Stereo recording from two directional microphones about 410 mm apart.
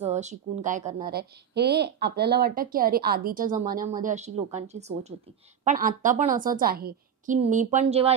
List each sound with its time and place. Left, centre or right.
0.0 s a woman's voice: centre